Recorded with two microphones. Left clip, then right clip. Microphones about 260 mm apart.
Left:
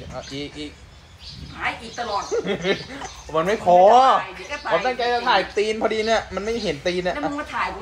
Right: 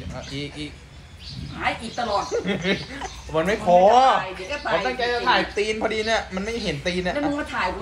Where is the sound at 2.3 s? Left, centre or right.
Left.